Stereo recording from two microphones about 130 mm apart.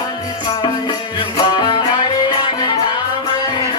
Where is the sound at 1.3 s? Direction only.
35° left (ahead or behind).